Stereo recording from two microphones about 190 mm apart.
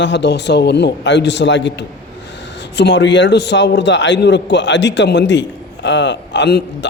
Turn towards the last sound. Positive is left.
turn(degrees=65)  # may be behind; listen again after turning